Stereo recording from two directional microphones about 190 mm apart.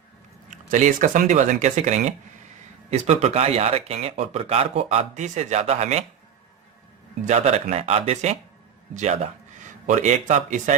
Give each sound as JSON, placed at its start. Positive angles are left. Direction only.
{"t": 0.5, "sound": "speech", "side_deg": -40}
{"t": 7.2, "sound": "a man's voice", "side_deg": -35}